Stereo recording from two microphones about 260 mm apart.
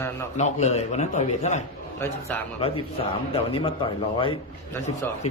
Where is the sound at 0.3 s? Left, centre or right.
Left.